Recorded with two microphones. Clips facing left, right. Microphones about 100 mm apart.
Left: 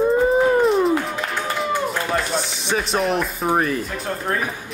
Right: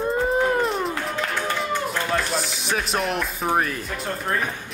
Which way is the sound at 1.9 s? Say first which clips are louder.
Left 2 dB; centre (ahead or behind).